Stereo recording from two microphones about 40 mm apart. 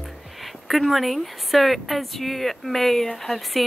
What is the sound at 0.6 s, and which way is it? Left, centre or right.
A woman's voice, centre.